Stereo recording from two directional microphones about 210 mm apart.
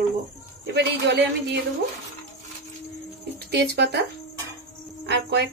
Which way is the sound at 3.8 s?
50° right (ahead or behind).